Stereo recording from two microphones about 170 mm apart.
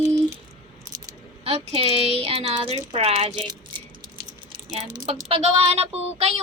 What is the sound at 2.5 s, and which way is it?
Speech, 30° right (ahead or behind).